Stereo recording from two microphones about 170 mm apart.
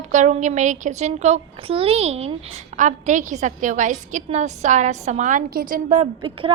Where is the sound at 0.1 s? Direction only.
45° right (ahead or behind).